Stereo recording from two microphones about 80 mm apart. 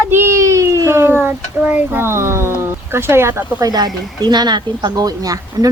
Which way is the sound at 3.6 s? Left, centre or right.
Right.